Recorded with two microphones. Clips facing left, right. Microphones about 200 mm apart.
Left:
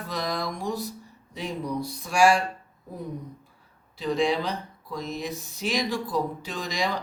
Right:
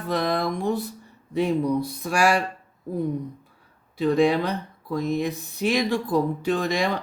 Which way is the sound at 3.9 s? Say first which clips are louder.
Right 5 dB; 55° right (ahead or behind).